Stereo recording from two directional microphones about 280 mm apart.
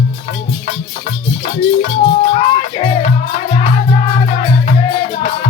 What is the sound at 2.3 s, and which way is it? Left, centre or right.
Music, left.